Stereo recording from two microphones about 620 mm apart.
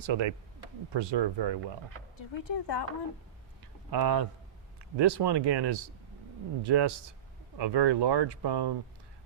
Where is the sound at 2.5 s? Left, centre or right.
Left.